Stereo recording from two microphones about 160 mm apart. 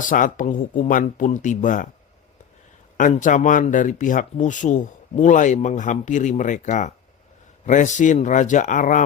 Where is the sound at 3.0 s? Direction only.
50° left (ahead or behind).